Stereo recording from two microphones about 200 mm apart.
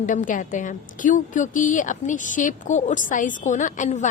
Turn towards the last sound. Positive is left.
turn(degrees=35)  # may be behind; listen again after turning